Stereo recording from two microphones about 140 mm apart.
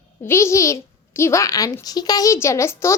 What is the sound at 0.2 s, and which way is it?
A child's voice, 20° left (ahead or behind).